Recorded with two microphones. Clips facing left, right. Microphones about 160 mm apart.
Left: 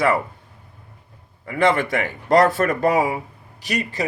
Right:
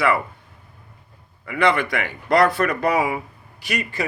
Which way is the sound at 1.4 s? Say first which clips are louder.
Left 1 dB; 40° left (ahead or behind).